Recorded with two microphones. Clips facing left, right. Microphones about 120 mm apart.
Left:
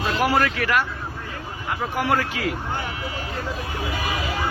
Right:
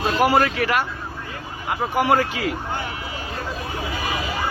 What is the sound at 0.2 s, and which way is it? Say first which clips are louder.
Speech: right 3 dB; 25° right (ahead or behind).